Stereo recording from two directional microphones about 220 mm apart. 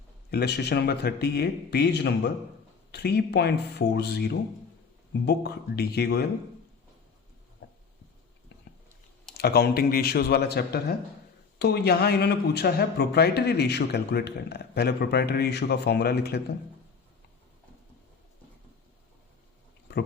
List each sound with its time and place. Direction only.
0.3 s speech: 50° left (ahead or behind)
7.6 s a sound: 60° left (ahead or behind)
9.4 s speech: 45° left (ahead or behind)